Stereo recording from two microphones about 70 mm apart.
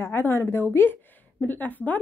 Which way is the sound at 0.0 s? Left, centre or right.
Left.